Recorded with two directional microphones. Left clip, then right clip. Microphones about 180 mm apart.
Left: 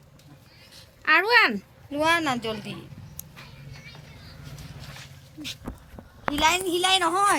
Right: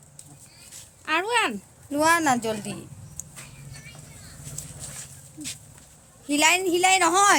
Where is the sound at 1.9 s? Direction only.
65° right (ahead or behind).